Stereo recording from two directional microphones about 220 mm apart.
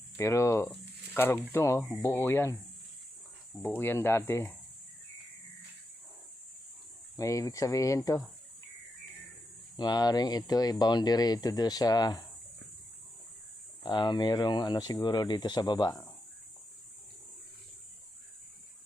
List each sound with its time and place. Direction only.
0.2 s speech: 15° left (ahead or behind)
3.8 s speech: 10° left (ahead or behind)
7.2 s speech: 15° left (ahead or behind)
9.7 s speech: 20° left (ahead or behind)
13.8 s speech: 20° left (ahead or behind)